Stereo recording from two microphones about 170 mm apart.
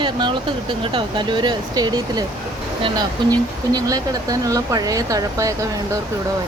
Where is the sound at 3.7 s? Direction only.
20° right (ahead or behind).